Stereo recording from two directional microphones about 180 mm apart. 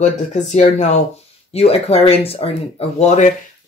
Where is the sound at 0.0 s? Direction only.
40° left (ahead or behind).